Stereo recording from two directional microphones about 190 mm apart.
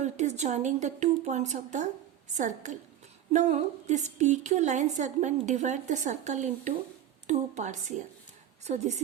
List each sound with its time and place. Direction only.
0.0 s a woman's voice: 35° right (ahead or behind)